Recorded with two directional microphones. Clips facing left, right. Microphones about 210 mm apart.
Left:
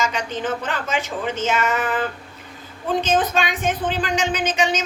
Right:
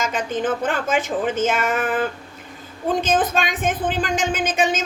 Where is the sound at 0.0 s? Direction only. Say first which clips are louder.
Right 2 dB; 50° right (ahead or behind).